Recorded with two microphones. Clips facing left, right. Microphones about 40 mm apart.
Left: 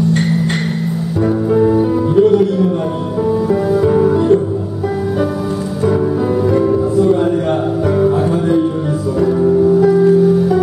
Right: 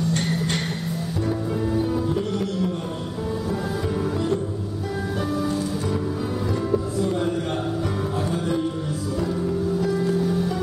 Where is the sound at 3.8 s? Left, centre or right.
Left.